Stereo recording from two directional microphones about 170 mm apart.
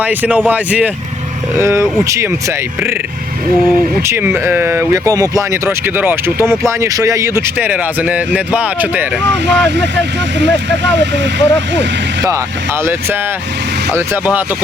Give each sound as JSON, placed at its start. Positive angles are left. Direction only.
{"t": 0.0, "sound": "speech", "side_deg": -10}
{"t": 4.0, "sound": "speech", "side_deg": -15}
{"t": 9.6, "sound": "speech", "side_deg": -90}